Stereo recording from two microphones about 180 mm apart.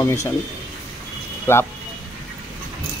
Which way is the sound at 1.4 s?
15° left (ahead or behind).